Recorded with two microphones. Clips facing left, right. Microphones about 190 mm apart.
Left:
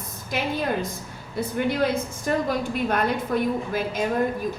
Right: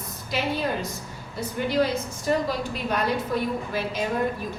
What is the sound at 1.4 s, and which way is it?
A woman's voice, 55° left (ahead or behind).